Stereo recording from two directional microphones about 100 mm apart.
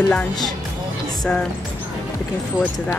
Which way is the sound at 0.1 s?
10° left (ahead or behind).